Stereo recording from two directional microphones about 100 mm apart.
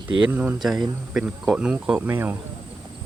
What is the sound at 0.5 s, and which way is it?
Speech, 5° right (ahead or behind).